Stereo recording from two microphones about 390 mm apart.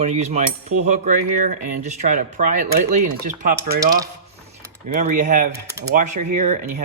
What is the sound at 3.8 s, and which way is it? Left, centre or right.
Speech, centre.